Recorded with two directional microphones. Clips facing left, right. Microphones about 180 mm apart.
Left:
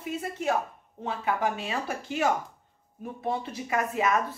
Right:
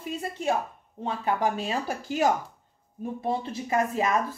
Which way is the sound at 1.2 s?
35° right (ahead or behind).